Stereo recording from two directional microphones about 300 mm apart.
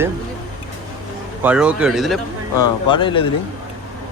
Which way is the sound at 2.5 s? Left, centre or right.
Centre.